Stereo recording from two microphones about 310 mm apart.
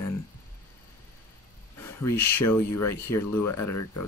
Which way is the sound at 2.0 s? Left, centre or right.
Centre.